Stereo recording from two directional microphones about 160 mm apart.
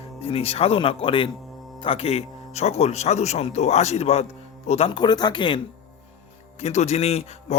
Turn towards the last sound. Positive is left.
turn(degrees=40)  # may be behind; listen again after turning